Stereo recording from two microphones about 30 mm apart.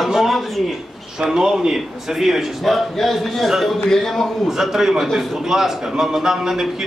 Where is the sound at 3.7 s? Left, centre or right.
Centre.